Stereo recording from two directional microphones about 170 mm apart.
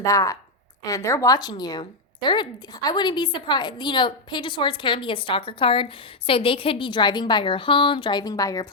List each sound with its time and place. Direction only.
0.0 s speech: 20° left (ahead or behind)